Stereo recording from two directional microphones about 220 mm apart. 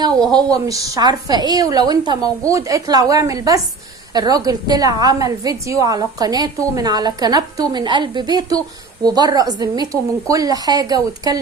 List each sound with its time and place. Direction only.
0.5 s a woman's voice: 15° right (ahead or behind)